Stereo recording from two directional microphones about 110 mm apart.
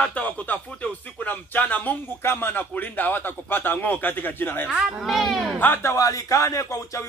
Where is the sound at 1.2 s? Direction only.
15° left (ahead or behind).